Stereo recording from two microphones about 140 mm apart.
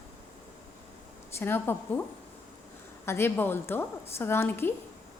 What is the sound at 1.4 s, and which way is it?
Speech, 15° left (ahead or behind).